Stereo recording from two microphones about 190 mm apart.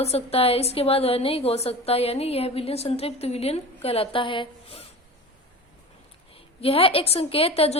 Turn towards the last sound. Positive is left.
turn(degrees=30)  # may be behind; listen again after turning